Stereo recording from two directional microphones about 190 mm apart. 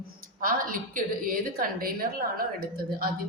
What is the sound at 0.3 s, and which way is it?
A woman's voice, 45° right (ahead or behind).